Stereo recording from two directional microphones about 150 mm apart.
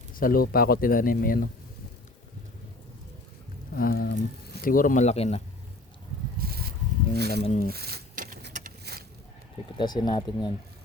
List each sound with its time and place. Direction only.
0.1 s speech: 70° left (ahead or behind)
3.8 s speech: 75° left (ahead or behind); by 5.4 s 45° left (ahead or behind)
6.5 s a sound: 90° right
7.2 s speech: 90° right
7.4 s speech: 50° left (ahead or behind)
7.7 s a sound: 90° right
9.7 s speech: 30° left (ahead or behind)